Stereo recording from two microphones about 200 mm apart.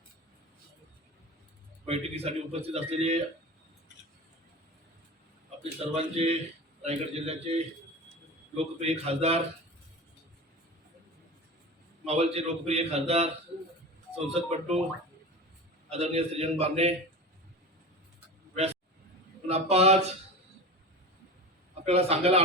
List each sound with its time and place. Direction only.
1.9 s a man's voice: 30° right (ahead or behind)
5.9 s a man's voice: 30° right (ahead or behind)
8.5 s a man's voice: 30° right (ahead or behind)
12.0 s a man's voice: 30° right (ahead or behind)
15.9 s a man's voice: 30° right (ahead or behind)
19.5 s a man's voice: 30° right (ahead or behind)
21.8 s a man's voice: 30° right (ahead or behind)